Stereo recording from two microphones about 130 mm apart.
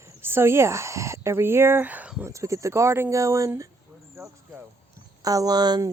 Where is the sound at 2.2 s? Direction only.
25° right (ahead or behind).